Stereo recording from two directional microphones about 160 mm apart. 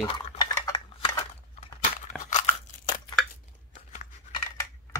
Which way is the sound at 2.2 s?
45° left (ahead or behind).